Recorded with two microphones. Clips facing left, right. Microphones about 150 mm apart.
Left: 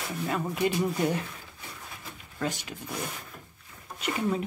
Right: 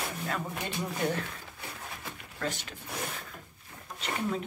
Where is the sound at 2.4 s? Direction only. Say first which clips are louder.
Left 3 dB; 15° left (ahead or behind).